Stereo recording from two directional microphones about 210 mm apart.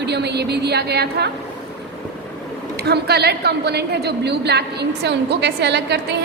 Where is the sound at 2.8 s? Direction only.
50° right (ahead or behind).